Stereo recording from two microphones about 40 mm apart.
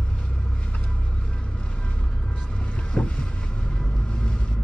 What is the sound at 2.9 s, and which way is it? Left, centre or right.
Boat, left.